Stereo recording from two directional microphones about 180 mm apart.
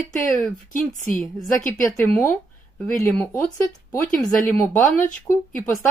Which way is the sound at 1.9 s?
15° left (ahead or behind).